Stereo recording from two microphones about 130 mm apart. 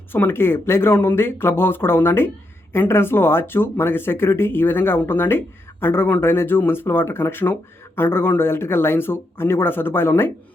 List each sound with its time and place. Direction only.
0.1 s speech: 15° left (ahead or behind)